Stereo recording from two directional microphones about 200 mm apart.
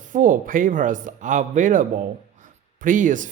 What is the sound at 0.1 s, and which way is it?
Speech, 40° right (ahead or behind).